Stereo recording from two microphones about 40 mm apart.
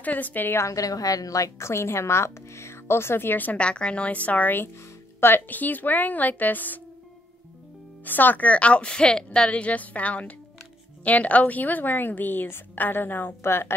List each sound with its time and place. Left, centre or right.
0.0 s a woman's voice: left
1.7 s a woman's voice: left
3.5 s a woman's voice: left
5.2 s a woman's voice: left
5.6 s a woman's voice: left
8.0 s a woman's voice: left
8.5 s speech: left
9.5 s a woman's voice: left